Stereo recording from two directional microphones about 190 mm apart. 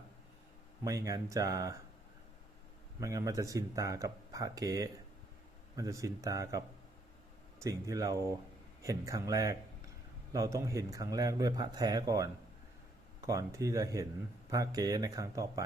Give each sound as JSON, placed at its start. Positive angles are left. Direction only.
{"t": 0.9, "sound": "speech", "side_deg": -15}
{"t": 3.0, "sound": "speech", "side_deg": -15}
{"t": 7.6, "sound": "a man's voice", "side_deg": -20}